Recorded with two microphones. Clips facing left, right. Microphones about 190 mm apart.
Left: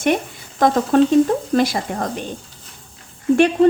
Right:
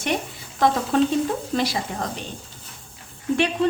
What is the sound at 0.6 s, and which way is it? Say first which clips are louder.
Speech: left 5 dB; 45° left (ahead or behind).